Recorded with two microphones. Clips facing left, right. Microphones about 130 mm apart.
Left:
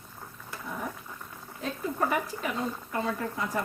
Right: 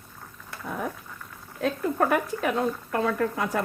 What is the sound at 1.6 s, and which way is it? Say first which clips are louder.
Speech: right 6 dB; 60° right (ahead or behind).